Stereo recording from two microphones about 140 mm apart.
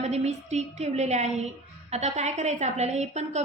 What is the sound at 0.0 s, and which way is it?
A woman's voice, 50° right (ahead or behind).